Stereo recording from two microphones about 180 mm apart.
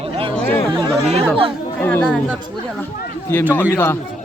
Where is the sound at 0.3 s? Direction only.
10° left (ahead or behind).